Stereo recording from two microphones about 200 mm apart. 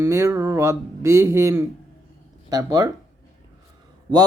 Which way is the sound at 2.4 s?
20° right (ahead or behind).